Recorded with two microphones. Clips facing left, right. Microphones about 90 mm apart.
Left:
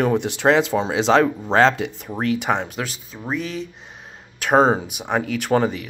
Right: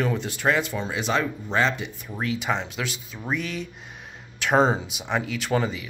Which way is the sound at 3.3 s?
35° left (ahead or behind).